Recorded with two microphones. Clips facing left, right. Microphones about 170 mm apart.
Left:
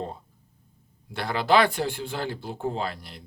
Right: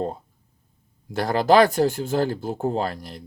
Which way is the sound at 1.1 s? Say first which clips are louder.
Right 5 dB; 40° right (ahead or behind).